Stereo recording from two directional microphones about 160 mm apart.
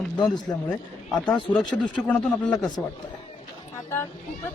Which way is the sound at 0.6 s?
5° left (ahead or behind).